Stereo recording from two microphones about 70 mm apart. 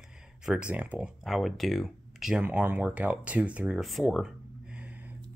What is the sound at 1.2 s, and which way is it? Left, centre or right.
Speech, centre.